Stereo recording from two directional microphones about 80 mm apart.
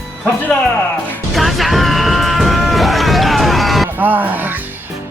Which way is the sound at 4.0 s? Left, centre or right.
Right.